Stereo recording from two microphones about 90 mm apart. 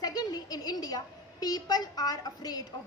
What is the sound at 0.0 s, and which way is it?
A woman's voice, 45° left (ahead or behind).